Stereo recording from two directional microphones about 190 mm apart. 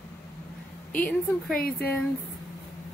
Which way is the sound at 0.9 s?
5° left (ahead or behind).